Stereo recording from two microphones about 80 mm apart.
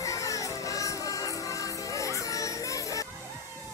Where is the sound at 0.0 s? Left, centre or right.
Left.